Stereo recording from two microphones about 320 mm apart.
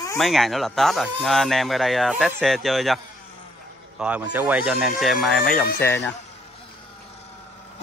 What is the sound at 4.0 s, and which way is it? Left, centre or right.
Speech, centre.